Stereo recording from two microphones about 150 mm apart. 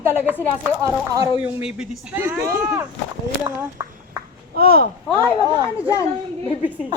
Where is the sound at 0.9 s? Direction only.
25° right (ahead or behind).